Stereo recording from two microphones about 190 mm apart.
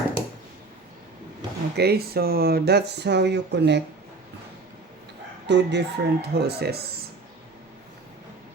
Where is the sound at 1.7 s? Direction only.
55° right (ahead or behind).